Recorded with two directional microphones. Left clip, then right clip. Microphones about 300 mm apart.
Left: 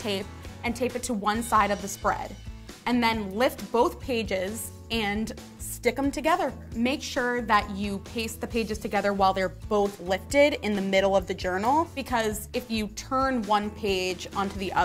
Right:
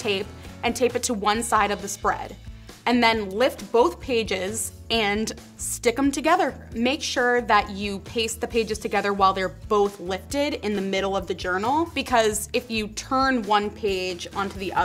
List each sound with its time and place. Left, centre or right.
0.0 s a woman's voice: left
2.8 s speech: left
3.3 s a woman's voice: left
12.6 s a woman's voice: left